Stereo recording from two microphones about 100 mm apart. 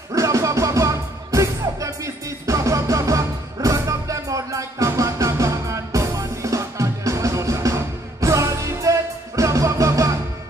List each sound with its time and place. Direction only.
0.1 s music: 35° right (ahead or behind)